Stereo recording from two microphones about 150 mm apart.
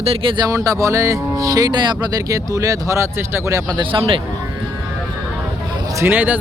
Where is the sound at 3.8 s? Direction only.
35° right (ahead or behind).